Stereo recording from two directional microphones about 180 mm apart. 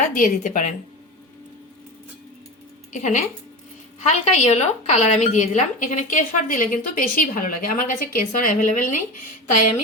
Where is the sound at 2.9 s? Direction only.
45° left (ahead or behind).